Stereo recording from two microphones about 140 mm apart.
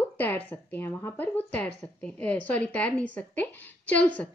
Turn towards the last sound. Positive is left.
turn(degrees=10)  # may be behind; listen again after turning